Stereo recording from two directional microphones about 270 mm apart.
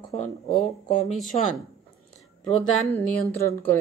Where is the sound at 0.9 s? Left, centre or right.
Left.